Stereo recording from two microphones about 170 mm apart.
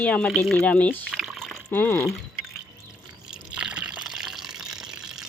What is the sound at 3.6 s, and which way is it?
Water, 5° right (ahead or behind).